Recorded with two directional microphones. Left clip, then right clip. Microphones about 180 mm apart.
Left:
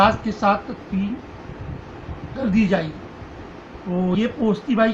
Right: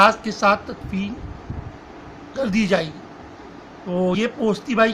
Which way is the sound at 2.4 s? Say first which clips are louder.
Right 1 dB; 20° right (ahead or behind).